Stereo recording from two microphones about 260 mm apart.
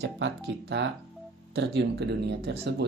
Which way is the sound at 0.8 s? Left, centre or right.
Right.